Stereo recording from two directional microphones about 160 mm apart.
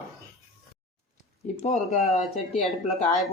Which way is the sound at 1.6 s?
45° left (ahead or behind).